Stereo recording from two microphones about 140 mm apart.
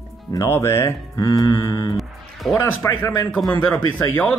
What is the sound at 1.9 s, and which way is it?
Music, centre (ahead or behind).